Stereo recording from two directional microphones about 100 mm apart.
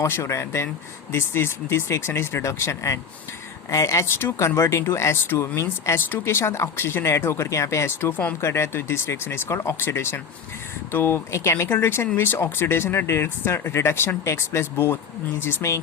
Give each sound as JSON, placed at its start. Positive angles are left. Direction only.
{"t": 0.0, "sound": "speech", "side_deg": 30}
{"t": 8.4, "sound": "speech", "side_deg": 25}